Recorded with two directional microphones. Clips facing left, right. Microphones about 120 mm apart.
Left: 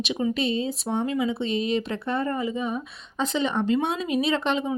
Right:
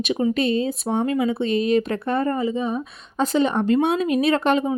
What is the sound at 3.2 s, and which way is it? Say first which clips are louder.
Speech: right 5 dB; 45° right (ahead or behind).